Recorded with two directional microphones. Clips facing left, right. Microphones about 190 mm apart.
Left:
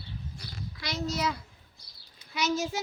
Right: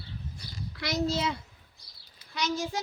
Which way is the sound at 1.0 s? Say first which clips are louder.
Right 2 dB; 30° right (ahead or behind).